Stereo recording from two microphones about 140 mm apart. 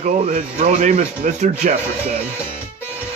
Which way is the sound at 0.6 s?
60° right (ahead or behind).